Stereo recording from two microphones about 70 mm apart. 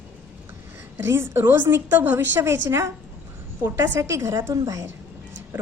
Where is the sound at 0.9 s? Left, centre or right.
Right.